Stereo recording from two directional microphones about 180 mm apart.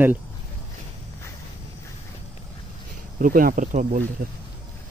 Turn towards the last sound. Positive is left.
turn(degrees=-45)  # may be behind; listen again after turning